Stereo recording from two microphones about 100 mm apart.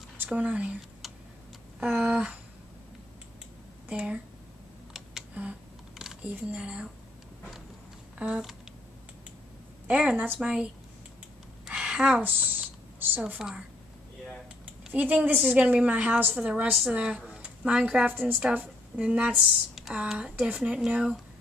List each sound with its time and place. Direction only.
0.2 s speech: 15° right (ahead or behind)
1.8 s a woman's voice: 10° right (ahead or behind)
3.9 s a woman's voice: 10° right (ahead or behind)
5.9 s camera: 5° right (ahead or behind)
6.3 s a woman's voice: 10° right (ahead or behind)
8.2 s a woman's voice: 5° right (ahead or behind)
9.8 s a woman's voice: 10° right (ahead or behind)
11.6 s a sound: 10° right (ahead or behind)
13.4 s a woman's voice: 5° right (ahead or behind)
14.9 s a woman's voice: 15° right (ahead or behind)